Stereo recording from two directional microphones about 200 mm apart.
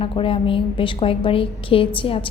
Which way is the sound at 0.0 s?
25° left (ahead or behind).